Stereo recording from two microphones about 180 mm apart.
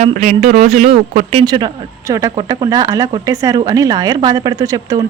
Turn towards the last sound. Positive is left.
turn(degrees=-20)  # may be behind; listen again after turning